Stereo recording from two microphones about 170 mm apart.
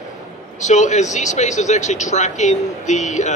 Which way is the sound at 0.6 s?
45° left (ahead or behind).